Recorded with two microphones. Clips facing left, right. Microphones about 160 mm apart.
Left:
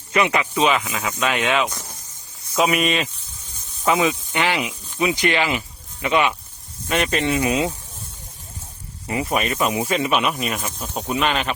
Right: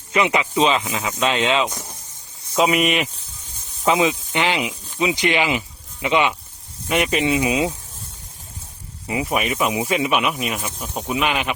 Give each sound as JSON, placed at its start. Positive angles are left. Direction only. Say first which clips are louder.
{"t": 0.1, "sound": "speech", "louder": "right 1 dB", "side_deg": -20}
{"t": 9.0, "sound": "speech", "louder": "even", "side_deg": -10}